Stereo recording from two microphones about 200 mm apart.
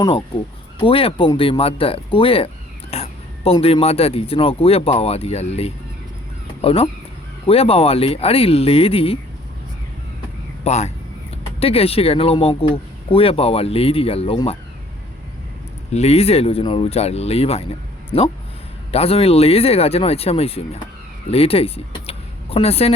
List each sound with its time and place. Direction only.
0.8 s speech: 25° left (ahead or behind)
10.6 s speech: 35° left (ahead or behind)
15.9 s speech: 35° left (ahead or behind)